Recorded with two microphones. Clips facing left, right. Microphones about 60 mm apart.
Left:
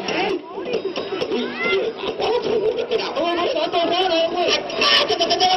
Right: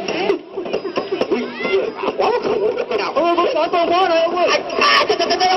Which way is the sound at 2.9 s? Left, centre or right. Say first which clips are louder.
Right 4 dB; right.